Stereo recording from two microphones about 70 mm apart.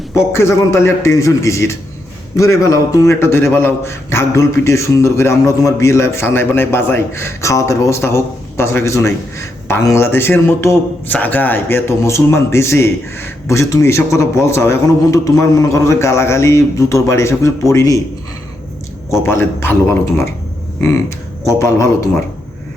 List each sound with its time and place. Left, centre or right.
0.3 s a man's voice: left
11.1 s a man's voice: left
16.0 s a man's voice: left
19.2 s a man's voice: left
21.6 s a man's voice: left